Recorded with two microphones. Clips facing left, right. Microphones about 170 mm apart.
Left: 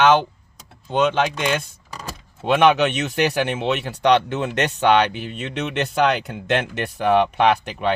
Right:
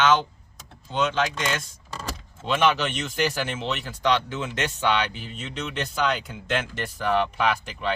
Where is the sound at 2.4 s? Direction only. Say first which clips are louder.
Left 7 dB; 60° left (ahead or behind).